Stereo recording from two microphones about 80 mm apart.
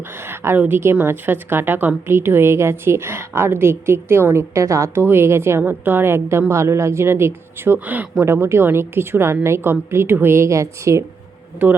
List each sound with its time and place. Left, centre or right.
0.2 s a woman's voice: right
11.6 s a woman's voice: right